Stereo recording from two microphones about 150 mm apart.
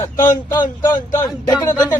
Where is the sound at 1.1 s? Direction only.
20° left (ahead or behind).